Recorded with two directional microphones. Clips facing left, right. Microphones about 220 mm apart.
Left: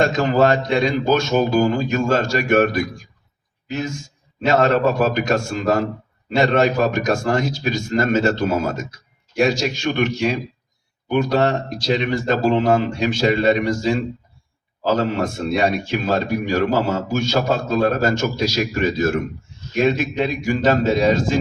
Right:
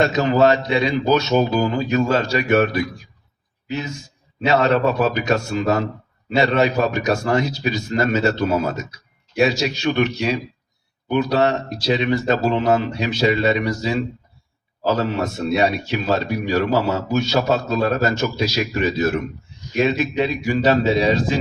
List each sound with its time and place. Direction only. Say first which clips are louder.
0.0 s a man's voice: right 1 dB; 50° left (ahead or behind)